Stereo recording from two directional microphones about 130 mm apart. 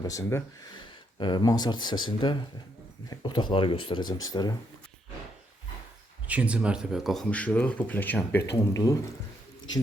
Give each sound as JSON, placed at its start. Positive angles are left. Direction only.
{"t": 0.0, "sound": "speech", "side_deg": 25}
{"t": 0.7, "sound": "speech", "side_deg": 35}
{"t": 6.2, "sound": "speech", "side_deg": -10}